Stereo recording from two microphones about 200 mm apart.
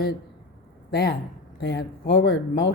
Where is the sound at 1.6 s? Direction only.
55° left (ahead or behind).